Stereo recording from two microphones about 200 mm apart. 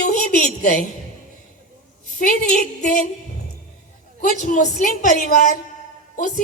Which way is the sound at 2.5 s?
40° left (ahead or behind).